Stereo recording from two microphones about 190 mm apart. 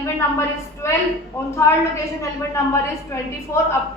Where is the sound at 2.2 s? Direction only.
15° left (ahead or behind).